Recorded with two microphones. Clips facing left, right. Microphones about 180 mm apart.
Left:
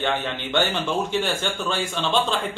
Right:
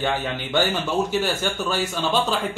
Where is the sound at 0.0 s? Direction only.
5° right (ahead or behind).